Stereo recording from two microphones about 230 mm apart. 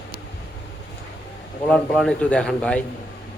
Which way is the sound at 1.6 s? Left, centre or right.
Centre.